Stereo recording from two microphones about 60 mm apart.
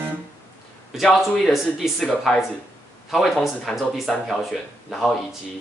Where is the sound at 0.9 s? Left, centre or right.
Centre.